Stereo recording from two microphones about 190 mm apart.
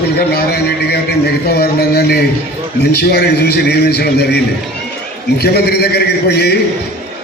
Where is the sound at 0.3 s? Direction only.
60° left (ahead or behind).